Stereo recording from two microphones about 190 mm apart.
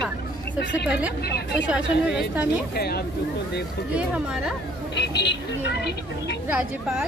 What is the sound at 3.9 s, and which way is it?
Speech, 5° right (ahead or behind).